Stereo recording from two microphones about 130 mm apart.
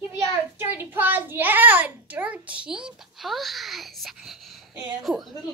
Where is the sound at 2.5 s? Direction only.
10° right (ahead or behind).